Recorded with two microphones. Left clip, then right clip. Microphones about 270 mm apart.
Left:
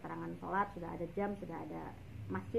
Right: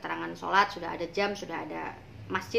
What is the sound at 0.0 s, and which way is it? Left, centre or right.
A woman's voice, centre.